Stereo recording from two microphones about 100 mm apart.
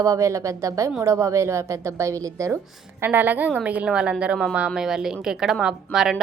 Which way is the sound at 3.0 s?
20° right (ahead or behind).